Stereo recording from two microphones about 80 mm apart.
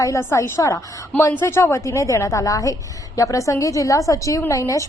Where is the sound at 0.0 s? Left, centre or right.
Left.